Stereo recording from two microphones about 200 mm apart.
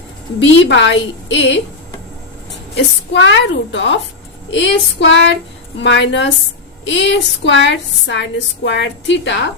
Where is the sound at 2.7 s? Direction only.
65° left (ahead or behind).